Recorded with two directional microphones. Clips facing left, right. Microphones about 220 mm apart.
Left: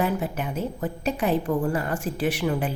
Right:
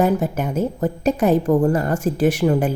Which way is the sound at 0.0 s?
45° right (ahead or behind).